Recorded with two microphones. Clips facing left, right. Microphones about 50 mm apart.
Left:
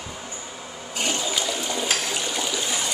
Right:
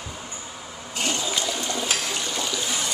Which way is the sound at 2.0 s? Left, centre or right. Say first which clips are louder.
Left 1 dB; centre.